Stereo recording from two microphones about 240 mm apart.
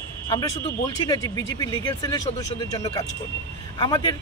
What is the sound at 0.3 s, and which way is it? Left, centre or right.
A man's voice, centre.